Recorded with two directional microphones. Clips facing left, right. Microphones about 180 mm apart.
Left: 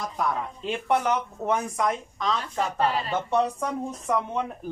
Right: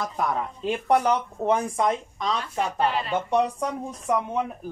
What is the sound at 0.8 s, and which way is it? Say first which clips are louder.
Speech: right 3 dB; 35° right (ahead or behind).